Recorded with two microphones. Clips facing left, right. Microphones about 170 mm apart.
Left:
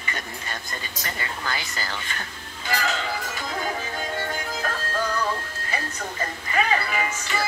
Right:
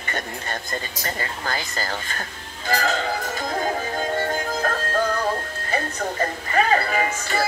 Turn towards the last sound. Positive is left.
turn(degrees=-45)  # may be behind; listen again after turning